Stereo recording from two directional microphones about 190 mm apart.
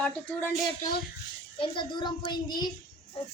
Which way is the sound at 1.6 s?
25° left (ahead or behind).